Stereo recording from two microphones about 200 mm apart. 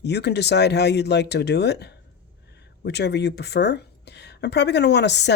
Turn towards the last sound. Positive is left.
turn(degrees=60)  # may be behind; listen again after turning